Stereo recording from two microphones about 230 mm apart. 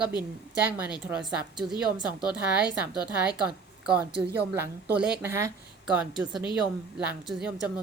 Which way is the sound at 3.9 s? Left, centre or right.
Centre.